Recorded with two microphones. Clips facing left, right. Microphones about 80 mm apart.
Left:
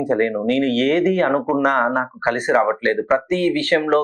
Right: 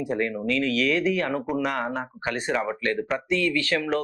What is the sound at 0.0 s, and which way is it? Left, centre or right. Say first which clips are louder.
Speech: left 8 dB; left.